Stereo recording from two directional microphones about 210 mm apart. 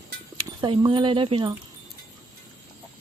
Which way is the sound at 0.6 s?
25° right (ahead or behind).